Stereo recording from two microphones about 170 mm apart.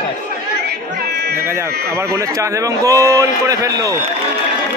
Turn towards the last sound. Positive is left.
turn(degrees=-20)  # may be behind; listen again after turning